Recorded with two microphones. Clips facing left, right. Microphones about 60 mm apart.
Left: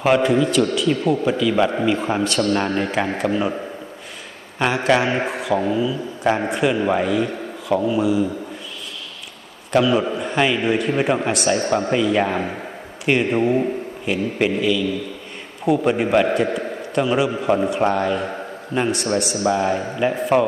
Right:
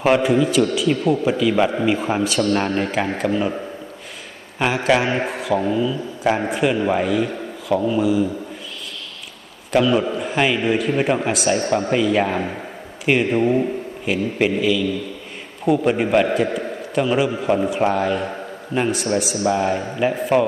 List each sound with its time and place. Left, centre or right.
0.0 s a man's voice: centre
4.6 s a man's voice: centre
9.7 s a man's voice: centre